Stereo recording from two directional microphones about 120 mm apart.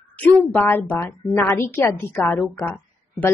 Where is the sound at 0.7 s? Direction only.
15° left (ahead or behind).